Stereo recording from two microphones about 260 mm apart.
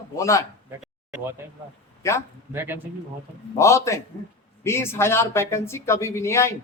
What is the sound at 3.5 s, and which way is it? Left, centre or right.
Speech, centre.